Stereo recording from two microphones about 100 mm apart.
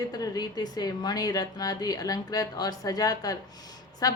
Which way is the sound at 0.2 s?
40° left (ahead or behind).